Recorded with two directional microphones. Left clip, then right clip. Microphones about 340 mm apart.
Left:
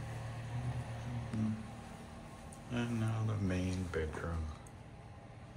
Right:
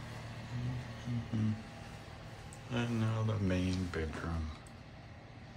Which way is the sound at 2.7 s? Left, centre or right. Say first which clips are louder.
Right 2 dB; centre.